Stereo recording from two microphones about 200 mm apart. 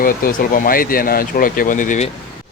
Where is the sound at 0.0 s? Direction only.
45° left (ahead or behind).